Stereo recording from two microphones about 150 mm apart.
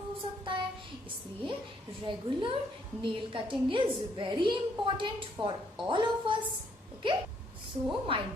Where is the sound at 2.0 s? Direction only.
35° right (ahead or behind).